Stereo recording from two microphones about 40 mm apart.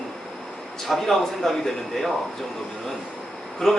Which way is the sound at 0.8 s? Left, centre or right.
Centre.